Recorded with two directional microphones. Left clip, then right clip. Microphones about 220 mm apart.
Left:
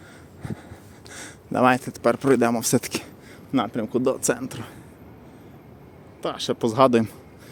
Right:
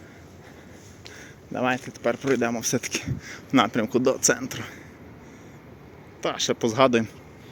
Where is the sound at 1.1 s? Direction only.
30° left (ahead or behind).